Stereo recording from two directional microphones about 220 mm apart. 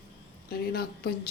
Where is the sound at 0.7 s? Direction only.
45° left (ahead or behind).